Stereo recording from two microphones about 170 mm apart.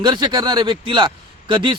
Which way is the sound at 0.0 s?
25° right (ahead or behind).